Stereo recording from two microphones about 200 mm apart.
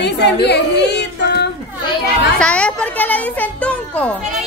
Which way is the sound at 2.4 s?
5° left (ahead or behind).